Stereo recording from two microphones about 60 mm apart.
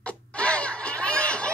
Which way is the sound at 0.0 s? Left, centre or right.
Centre.